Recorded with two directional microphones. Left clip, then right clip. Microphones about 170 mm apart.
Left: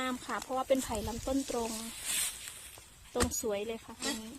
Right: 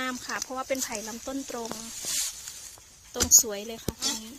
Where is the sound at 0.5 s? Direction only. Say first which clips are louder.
Left 3 dB; 15° left (ahead or behind).